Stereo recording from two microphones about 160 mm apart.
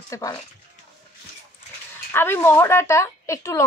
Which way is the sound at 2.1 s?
15° left (ahead or behind).